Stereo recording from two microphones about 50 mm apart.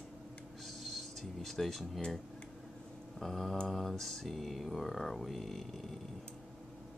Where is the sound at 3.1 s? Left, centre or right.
Centre.